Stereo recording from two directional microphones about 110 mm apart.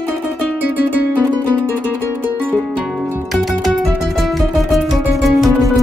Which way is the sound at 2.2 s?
15° right (ahead or behind).